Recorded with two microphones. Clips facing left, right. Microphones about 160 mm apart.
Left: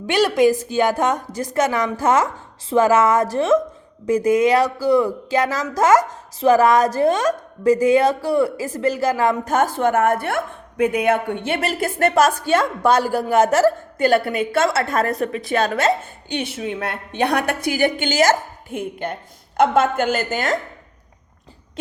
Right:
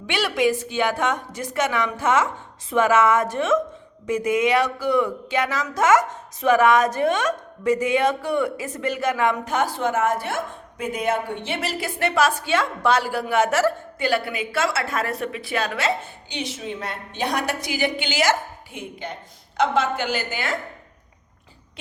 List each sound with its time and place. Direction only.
0.1 s speech: 40° left (ahead or behind)
16.3 s a woman's voice: 60° left (ahead or behind); by 20.6 s 45° left (ahead or behind)